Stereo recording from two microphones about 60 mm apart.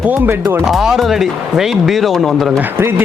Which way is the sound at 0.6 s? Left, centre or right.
Centre.